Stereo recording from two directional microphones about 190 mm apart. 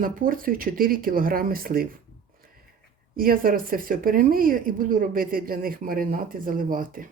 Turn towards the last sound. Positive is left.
turn(degrees=-45)  # may be behind; listen again after turning